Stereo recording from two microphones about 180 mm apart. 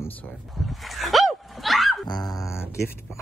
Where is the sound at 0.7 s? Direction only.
Centre (ahead or behind).